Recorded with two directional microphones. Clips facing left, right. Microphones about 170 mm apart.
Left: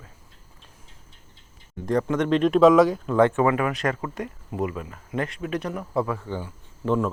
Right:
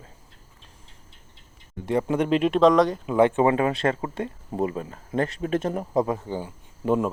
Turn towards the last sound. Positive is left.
turn(degrees=-15)  # may be behind; listen again after turning